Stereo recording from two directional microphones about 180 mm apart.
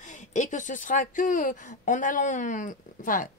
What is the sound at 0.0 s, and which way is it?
Speech, 45° left (ahead or behind).